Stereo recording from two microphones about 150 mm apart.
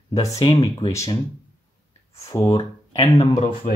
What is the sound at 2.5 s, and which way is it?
Speech, 40° left (ahead or behind).